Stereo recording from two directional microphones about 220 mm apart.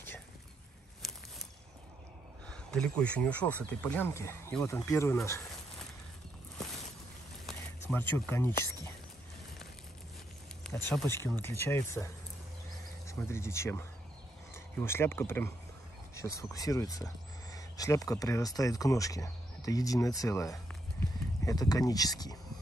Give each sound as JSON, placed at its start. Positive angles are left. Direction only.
{"t": 2.4, "sound": "speech", "side_deg": 5}
{"t": 7.4, "sound": "speech", "side_deg": 10}
{"t": 10.6, "sound": "speech", "side_deg": 5}